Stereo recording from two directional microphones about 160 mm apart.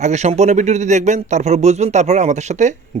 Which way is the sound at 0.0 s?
45° right (ahead or behind).